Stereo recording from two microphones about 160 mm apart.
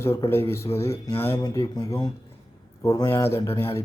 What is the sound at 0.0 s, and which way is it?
Speech, 15° left (ahead or behind).